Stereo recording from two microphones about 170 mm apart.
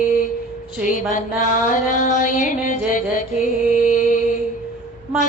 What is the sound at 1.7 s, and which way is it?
Music, 50° left (ahead or behind).